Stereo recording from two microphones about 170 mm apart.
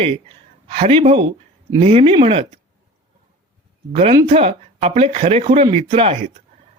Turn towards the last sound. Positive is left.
turn(degrees=-35)  # may be behind; listen again after turning